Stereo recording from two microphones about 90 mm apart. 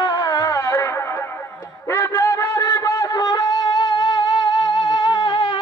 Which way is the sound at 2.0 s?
30° left (ahead or behind).